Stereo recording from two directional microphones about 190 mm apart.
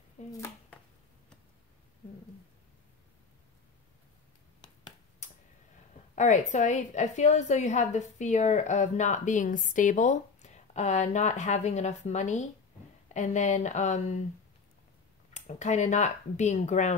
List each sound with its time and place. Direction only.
6.1 s a woman's voice: 40° left (ahead or behind)
15.3 s a woman's voice: 40° left (ahead or behind)